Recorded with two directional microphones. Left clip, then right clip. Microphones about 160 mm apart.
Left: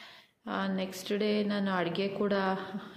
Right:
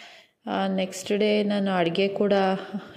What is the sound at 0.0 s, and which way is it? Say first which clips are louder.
A woman's voice: right 7 dB; 40° right (ahead or behind).